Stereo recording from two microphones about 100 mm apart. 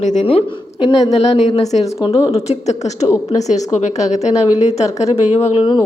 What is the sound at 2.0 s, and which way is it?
Speech, 80° left.